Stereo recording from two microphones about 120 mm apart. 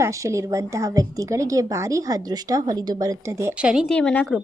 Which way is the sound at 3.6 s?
10° right (ahead or behind).